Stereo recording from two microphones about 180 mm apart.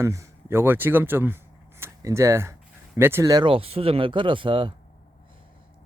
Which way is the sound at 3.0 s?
15° right (ahead or behind).